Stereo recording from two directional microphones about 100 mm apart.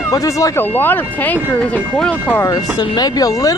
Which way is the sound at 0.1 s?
35° left (ahead or behind).